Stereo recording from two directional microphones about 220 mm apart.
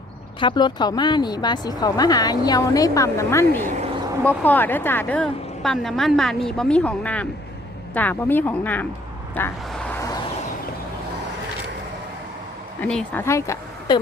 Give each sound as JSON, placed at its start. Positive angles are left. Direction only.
{"t": 0.3, "sound": "a woman's voice", "side_deg": 20}
{"t": 9.3, "sound": "vehicle", "side_deg": 5}
{"t": 12.8, "sound": "a woman's voice", "side_deg": 5}